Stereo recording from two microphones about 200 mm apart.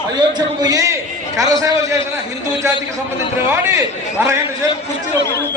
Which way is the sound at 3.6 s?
15° right (ahead or behind).